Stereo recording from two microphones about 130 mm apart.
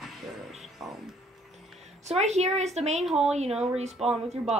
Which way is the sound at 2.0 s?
60° right (ahead or behind).